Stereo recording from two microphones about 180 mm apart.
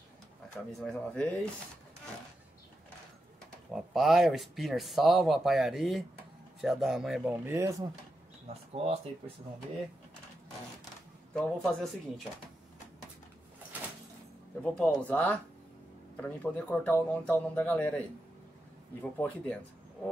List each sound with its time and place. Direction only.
0.7 s speech: 5° left (ahead or behind)
3.7 s speech: centre (ahead or behind)
7.3 s speech: 15° right (ahead or behind)
8.7 s speech: 35° right (ahead or behind)
11.3 s speech: 5° left (ahead or behind)
14.6 s speech: 5° left (ahead or behind)
19.0 s speech: 10° left (ahead or behind)